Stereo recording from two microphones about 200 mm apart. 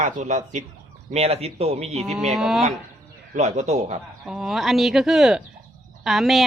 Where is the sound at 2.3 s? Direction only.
Centre (ahead or behind).